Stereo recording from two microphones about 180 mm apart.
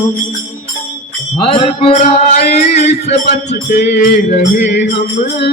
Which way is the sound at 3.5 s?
65° left (ahead or behind).